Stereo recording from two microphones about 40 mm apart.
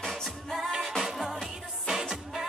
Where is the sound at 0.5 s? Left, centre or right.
Centre.